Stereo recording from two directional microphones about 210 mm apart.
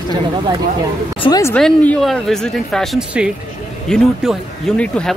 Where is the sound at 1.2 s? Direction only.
20° left (ahead or behind).